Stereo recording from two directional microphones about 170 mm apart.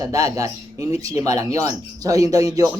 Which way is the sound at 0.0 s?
20° right (ahead or behind).